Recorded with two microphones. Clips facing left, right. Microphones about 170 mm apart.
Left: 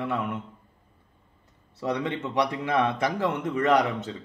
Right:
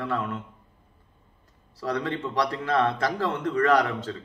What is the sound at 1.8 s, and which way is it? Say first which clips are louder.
Speech: even; 20° left (ahead or behind).